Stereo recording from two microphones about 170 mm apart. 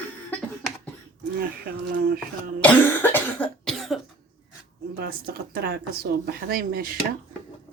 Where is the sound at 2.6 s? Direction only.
10° left (ahead or behind).